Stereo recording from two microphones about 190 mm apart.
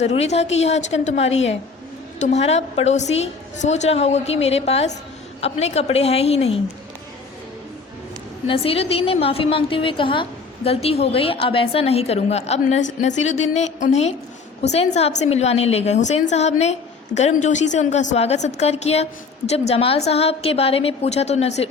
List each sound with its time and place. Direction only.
0.0 s a woman's voice: 35° left (ahead or behind)
8.4 s a woman's voice: 30° left (ahead or behind)